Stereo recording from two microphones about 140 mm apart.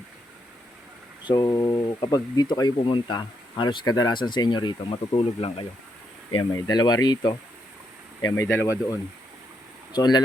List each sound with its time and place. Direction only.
1.2 s speech: 30° left (ahead or behind)
6.5 s speech: 30° left (ahead or behind)
8.2 s speech: 20° left (ahead or behind)